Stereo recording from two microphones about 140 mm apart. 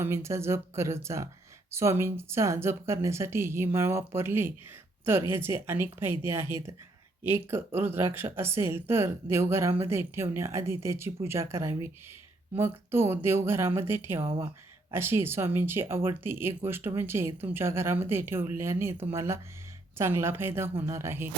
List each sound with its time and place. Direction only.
0.0 s a woman's voice: 20° right (ahead or behind)